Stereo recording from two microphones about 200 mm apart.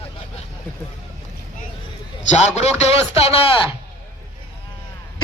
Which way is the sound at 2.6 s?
30° left (ahead or behind).